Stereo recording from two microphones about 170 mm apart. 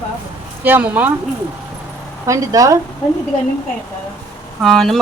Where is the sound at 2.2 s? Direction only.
20° right (ahead or behind).